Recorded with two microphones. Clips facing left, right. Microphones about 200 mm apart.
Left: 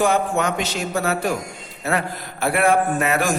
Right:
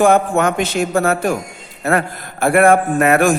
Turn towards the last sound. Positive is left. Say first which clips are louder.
# right 7 dB
turn(degrees=-55)  # may be behind; listen again after turning